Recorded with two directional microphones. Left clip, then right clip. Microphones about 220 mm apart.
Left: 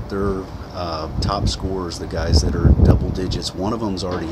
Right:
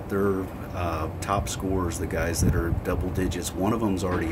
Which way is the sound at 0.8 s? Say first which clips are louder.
Left 5 dB; 20° right (ahead or behind).